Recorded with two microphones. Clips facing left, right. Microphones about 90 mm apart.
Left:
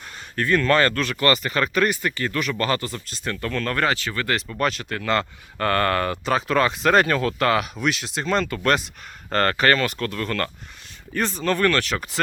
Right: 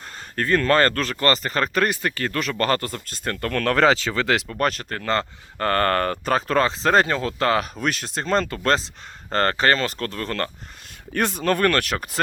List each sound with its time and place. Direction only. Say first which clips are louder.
0.3 s speech: even; 40° right (ahead or behind); by 4.4 s 90° right
4.4 s speech: right 1 dB; 45° right (ahead or behind)
11.1 s speech: right 2 dB; 60° right (ahead or behind)